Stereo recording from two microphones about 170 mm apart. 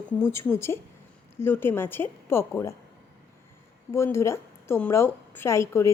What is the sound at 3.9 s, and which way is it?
A woman's voice, 15° left (ahead or behind).